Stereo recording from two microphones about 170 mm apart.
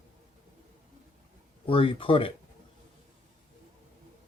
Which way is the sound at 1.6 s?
30° left (ahead or behind).